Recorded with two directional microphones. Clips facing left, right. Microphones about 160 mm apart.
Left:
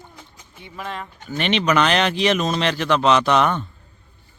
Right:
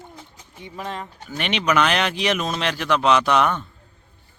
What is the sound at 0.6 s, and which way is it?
Speech, 35° right (ahead or behind).